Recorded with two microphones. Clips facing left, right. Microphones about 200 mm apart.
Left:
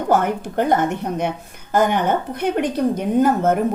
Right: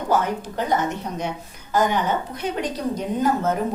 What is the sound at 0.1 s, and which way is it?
A woman's voice, 55° left (ahead or behind).